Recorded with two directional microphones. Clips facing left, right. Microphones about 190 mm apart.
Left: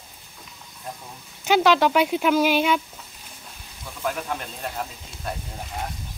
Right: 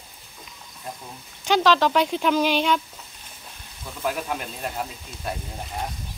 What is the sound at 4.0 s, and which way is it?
Speech, 5° right (ahead or behind).